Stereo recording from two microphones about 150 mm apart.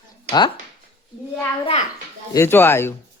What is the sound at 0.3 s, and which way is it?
Speech, 30° left (ahead or behind).